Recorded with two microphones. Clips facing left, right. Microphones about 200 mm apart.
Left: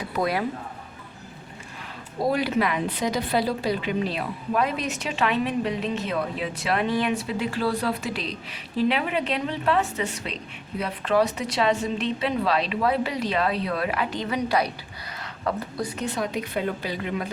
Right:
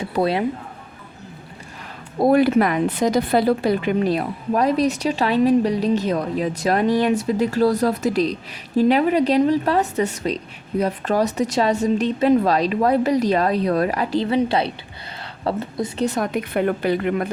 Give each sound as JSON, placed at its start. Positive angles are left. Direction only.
{"t": 0.0, "sound": "speech", "side_deg": -30}
{"t": 2.2, "sound": "speech", "side_deg": -50}
{"t": 16.0, "sound": "a woman's voice", "side_deg": -50}